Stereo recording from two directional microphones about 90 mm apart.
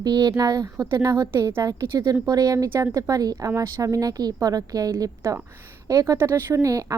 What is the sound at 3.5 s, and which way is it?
A woman's voice, 30° right (ahead or behind).